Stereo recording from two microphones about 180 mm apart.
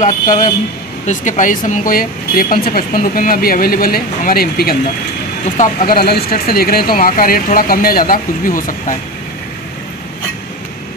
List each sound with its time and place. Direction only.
0.0 s speech: 45° left (ahead or behind)